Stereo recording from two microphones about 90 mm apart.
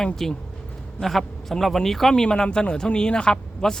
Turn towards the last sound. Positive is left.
turn(degrees=10)  # may be behind; listen again after turning